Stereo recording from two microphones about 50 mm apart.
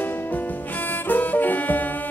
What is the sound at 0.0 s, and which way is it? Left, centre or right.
Music, left.